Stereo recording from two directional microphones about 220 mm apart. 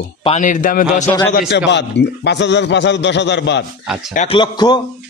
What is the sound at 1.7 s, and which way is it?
A man's voice, 50° left (ahead or behind).